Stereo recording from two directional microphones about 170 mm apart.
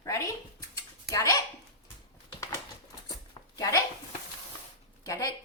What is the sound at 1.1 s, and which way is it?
Speech, 20° left (ahead or behind).